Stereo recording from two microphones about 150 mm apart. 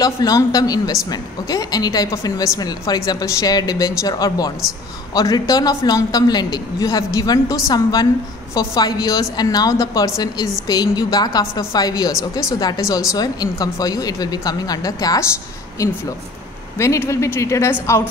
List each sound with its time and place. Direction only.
0.0 s speech: 25° left (ahead or behind)
16.7 s speech: 20° left (ahead or behind)